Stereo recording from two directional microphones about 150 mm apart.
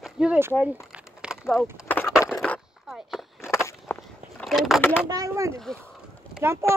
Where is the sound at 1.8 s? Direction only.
10° left (ahead or behind).